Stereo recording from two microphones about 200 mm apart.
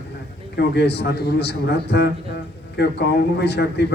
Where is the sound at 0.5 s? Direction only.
55° left (ahead or behind).